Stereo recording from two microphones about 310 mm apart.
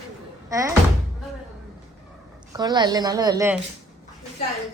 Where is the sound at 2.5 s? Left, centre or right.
Centre.